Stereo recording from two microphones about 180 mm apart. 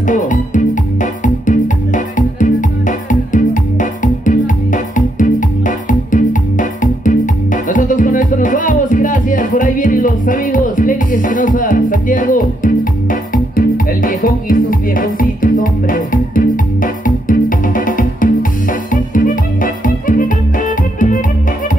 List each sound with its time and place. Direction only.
0.0 s music: 45° left (ahead or behind)